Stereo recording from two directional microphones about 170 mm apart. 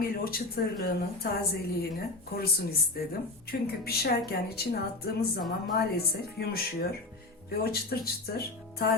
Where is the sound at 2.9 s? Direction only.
70° left (ahead or behind).